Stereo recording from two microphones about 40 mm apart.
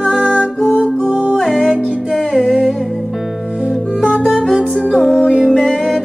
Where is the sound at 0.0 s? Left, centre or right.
Left.